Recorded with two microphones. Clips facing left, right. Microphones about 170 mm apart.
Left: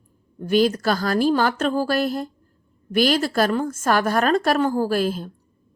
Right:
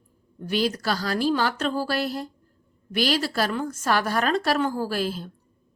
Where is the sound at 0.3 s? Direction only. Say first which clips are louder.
Left 7 dB; 50° left (ahead or behind).